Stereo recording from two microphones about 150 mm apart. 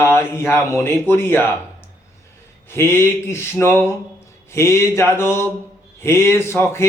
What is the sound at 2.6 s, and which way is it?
Speech, 15° left (ahead or behind).